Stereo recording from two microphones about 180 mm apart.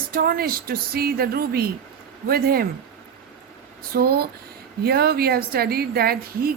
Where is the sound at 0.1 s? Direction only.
55° right (ahead or behind).